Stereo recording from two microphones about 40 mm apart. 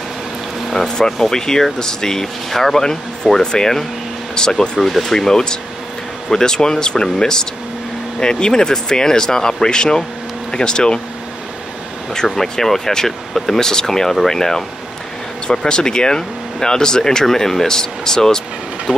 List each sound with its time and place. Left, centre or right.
0.7 s speech: centre
4.7 s speech: centre; by 11.0 s left
12.4 s speech: centre
18.9 s a sound: right